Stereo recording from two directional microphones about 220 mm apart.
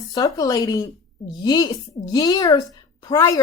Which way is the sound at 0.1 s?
15° left (ahead or behind).